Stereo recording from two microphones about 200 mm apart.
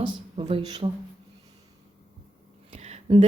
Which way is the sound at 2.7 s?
35° right (ahead or behind).